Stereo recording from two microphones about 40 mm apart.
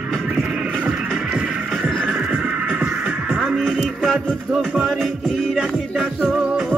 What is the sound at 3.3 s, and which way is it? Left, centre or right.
Music, centre.